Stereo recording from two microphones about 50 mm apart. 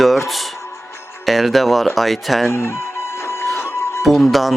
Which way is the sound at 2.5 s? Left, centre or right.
Left.